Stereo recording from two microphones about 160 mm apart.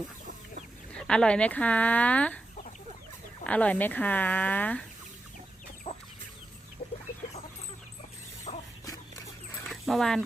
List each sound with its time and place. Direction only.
0.9 s speech: 5° left (ahead or behind)
3.4 s speech: 10° left (ahead or behind)
8.5 s dog: 40° left (ahead or behind)
9.6 s dog: centre (ahead or behind)